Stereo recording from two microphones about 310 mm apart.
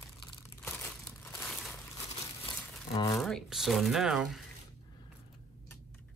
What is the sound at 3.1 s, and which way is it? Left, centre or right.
Speech, centre.